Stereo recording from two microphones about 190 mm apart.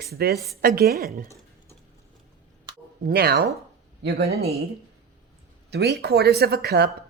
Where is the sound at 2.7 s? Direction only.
20° right (ahead or behind).